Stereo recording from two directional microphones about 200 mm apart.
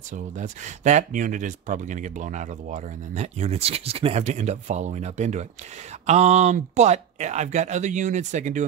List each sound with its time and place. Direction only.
0.1 s speech: 40° right (ahead or behind)